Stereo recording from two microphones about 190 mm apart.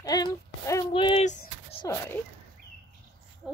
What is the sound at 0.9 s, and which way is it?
Speech, 30° left (ahead or behind).